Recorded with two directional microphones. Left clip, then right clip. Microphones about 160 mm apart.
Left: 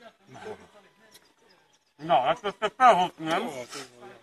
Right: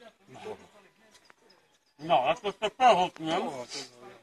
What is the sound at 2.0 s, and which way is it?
Speech, 20° right (ahead or behind).